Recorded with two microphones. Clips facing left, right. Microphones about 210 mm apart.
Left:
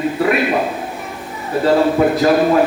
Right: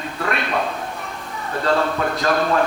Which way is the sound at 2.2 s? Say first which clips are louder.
Left 4 dB; 15° left (ahead or behind).